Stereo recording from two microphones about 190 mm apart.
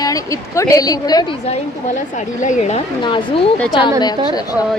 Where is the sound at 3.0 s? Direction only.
25° left (ahead or behind).